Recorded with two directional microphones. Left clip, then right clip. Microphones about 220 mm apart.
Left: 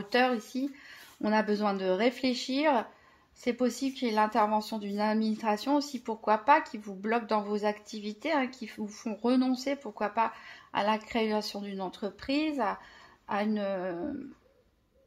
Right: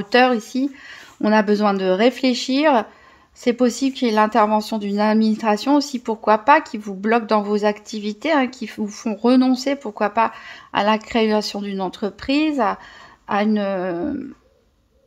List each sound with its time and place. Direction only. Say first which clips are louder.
0.0 s speech: right 12 dB; 35° right (ahead or behind)